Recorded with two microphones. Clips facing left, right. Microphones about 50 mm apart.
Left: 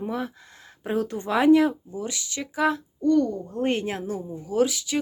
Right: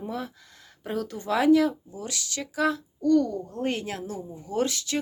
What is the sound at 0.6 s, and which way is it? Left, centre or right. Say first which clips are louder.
Speech: left 5 dB; left.